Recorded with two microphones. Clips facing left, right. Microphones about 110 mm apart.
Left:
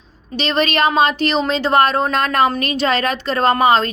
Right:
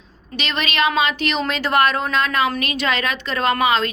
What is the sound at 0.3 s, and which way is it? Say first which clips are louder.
A woman's voice: left 5 dB; 35° left (ahead or behind).